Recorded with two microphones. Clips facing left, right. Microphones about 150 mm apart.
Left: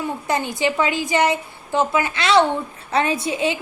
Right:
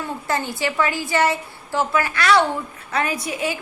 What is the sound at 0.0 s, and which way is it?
A woman's voice, 20° left (ahead or behind).